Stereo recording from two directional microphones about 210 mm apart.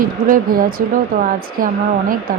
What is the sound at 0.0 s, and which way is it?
A woman's voice, 40° right (ahead or behind).